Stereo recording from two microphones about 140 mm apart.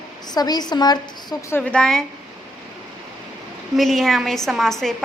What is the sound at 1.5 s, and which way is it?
Speech, 10° left (ahead or behind).